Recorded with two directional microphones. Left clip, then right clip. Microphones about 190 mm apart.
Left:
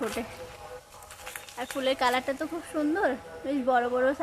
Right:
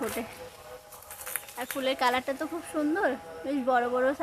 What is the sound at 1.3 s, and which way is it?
Speech, centre (ahead or behind).